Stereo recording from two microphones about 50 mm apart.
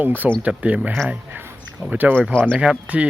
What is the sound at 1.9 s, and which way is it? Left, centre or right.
Speech, right.